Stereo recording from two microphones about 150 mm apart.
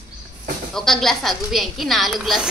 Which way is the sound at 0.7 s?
5° left (ahead or behind).